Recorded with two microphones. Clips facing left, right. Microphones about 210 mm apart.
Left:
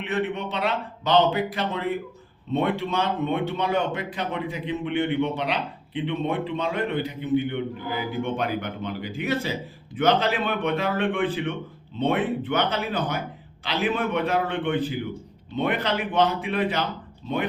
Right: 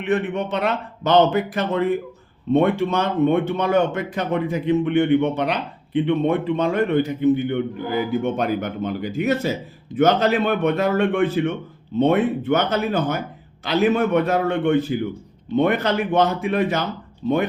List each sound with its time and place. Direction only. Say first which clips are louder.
0.0 s speech: right 5 dB; 50° right (ahead or behind)